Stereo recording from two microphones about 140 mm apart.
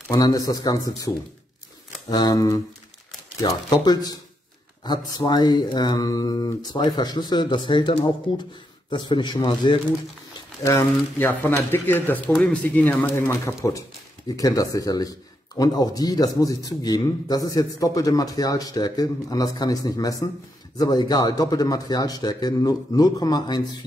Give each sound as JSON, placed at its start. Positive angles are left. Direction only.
{"t": 0.1, "sound": "speech", "side_deg": 25}
{"t": 10.6, "sound": "speech", "side_deg": 20}